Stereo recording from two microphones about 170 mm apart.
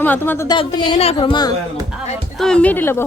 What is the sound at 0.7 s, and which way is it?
Speech, 40° left (ahead or behind).